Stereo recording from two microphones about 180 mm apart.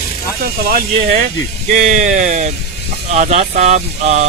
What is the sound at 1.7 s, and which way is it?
Speech, 45° right (ahead or behind).